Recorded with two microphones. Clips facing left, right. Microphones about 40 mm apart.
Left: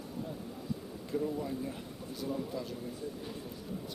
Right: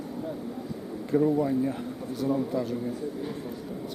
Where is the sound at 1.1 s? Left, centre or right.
Right.